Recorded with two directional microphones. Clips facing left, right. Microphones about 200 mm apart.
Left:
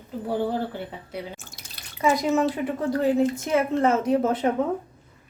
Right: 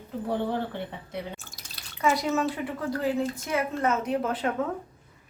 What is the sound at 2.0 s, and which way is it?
Speech, 15° left (ahead or behind).